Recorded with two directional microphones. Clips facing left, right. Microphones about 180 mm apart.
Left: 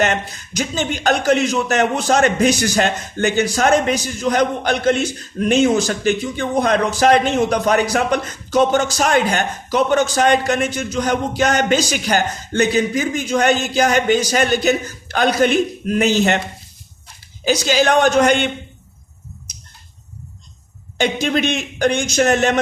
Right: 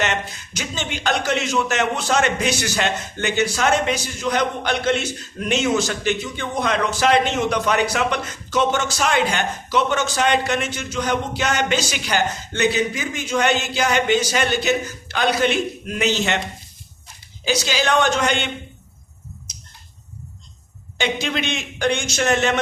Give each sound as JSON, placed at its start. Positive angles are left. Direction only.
{"t": 0.0, "sound": "speech", "side_deg": 45}
{"t": 17.4, "sound": "speech", "side_deg": 45}
{"t": 21.0, "sound": "speech", "side_deg": 45}